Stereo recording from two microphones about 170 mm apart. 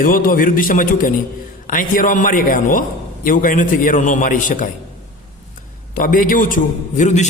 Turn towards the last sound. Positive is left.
turn(degrees=45)  # may be behind; listen again after turning